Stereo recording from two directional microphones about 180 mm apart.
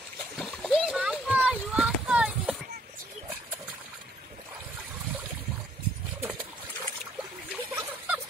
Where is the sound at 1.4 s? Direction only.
5° right (ahead or behind).